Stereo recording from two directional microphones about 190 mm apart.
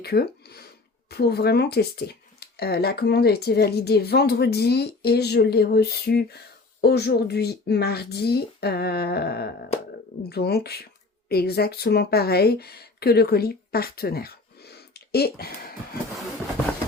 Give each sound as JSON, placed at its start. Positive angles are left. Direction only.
{"t": 0.0, "sound": "speech", "side_deg": 55}